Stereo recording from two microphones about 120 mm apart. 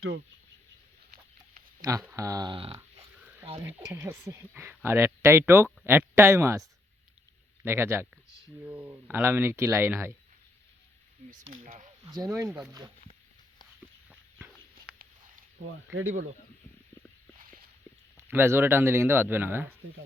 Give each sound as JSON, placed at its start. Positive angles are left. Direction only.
{"t": 1.8, "sound": "speech", "side_deg": -30}
{"t": 2.5, "sound": "a sound", "side_deg": -45}
{"t": 3.6, "sound": "speech", "side_deg": -20}
{"t": 7.6, "sound": "speech", "side_deg": -20}
{"t": 12.1, "sound": "speech", "side_deg": -30}
{"t": 15.9, "sound": "speech", "side_deg": -20}
{"t": 18.2, "sound": "speech", "side_deg": -20}